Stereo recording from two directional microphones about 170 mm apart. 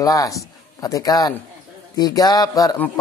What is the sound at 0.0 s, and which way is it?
A man's voice, 20° left (ahead or behind).